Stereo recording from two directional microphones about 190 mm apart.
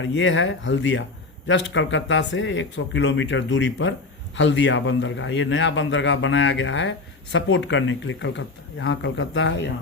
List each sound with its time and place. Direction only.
0.0 s a man's voice: 75° left (ahead or behind)